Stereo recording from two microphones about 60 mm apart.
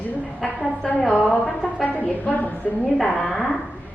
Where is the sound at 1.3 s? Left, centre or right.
Left.